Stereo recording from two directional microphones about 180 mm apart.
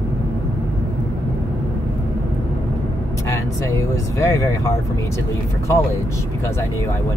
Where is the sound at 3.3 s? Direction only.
15° left (ahead or behind).